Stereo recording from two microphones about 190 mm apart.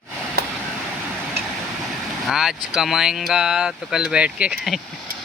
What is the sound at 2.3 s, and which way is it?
Speech, centre (ahead or behind).